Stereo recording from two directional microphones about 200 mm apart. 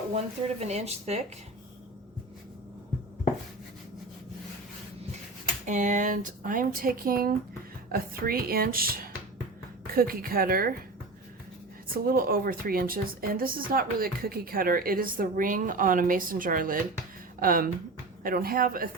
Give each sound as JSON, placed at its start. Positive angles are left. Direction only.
{"t": 0.1, "sound": "speech", "side_deg": -30}
{"t": 5.6, "sound": "a woman's voice", "side_deg": -40}
{"t": 12.0, "sound": "a woman's voice", "side_deg": -45}